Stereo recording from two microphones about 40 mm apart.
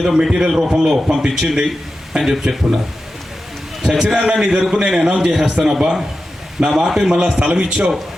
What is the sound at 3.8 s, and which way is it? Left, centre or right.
A man's voice, centre.